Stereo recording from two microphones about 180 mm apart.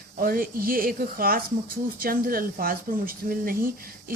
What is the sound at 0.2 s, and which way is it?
Speech, 50° right (ahead or behind).